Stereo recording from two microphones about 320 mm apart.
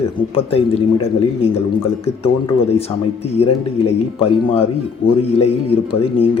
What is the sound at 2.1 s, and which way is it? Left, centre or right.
Speech, centre.